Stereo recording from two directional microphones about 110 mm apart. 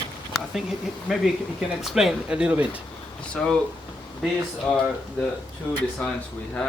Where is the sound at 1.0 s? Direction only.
Centre (ahead or behind).